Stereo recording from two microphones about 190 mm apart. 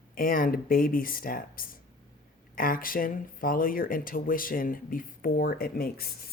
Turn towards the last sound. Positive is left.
turn(degrees=50)  # may be behind; listen again after turning